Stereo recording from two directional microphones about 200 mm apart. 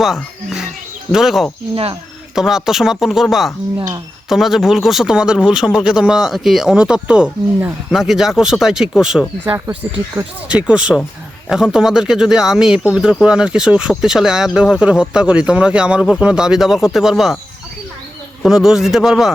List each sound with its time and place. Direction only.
0.0 s music: centre (ahead or behind)
1.1 s speech: centre (ahead or behind)
1.7 s speech: 25° right (ahead or behind)
2.3 s speech: centre (ahead or behind)
3.8 s speech: 20° right (ahead or behind)
4.3 s speech: centre (ahead or behind)
18.4 s speech: centre (ahead or behind)